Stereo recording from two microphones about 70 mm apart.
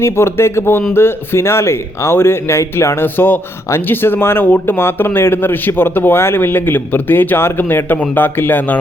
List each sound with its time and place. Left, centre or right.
0.0 s a man's voice: left